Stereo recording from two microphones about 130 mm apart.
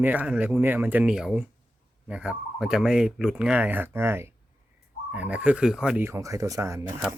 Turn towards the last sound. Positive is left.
turn(degrees=-20)  # may be behind; listen again after turning